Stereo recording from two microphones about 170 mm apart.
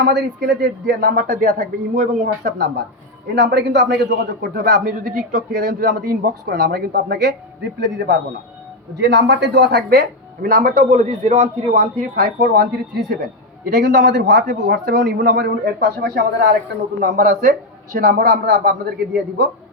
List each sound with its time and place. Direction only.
0.0 s speech: 75° right (ahead or behind); by 2.8 s 60° right (ahead or behind)
3.2 s a man's voice: 80° right
13.8 s a man's voice: 85° right
17.0 s a man's voice: 55° right (ahead or behind)